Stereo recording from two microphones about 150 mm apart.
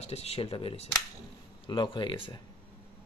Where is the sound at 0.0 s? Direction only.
45° left (ahead or behind).